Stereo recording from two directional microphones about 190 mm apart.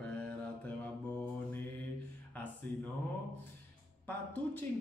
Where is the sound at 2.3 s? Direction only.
10° left (ahead or behind).